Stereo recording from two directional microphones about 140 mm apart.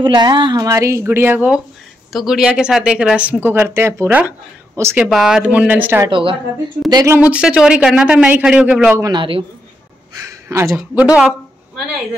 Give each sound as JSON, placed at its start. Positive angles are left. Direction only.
{"t": 0.0, "sound": "speech", "side_deg": -30}
{"t": 0.7, "sound": "speech", "side_deg": -20}
{"t": 5.0, "sound": "speech", "side_deg": -5}
{"t": 6.0, "sound": "speech", "side_deg": -35}
{"t": 6.9, "sound": "speech", "side_deg": -25}
{"t": 7.2, "sound": "speech", "side_deg": -10}
{"t": 9.1, "sound": "speech", "side_deg": -35}
{"t": 10.2, "sound": "a sound", "side_deg": -20}
{"t": 11.0, "sound": "speech", "side_deg": -5}